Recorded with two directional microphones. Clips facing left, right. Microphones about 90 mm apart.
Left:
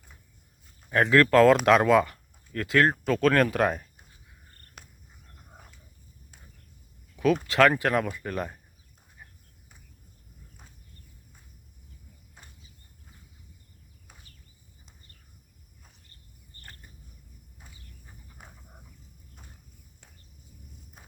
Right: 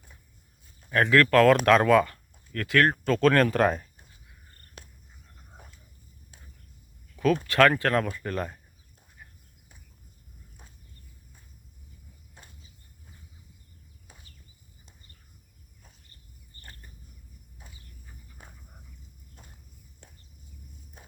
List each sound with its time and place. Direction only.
0.9 s speech: 15° left (ahead or behind)
2.9 s speech: 5° left (ahead or behind)
7.2 s speech: 15° left (ahead or behind)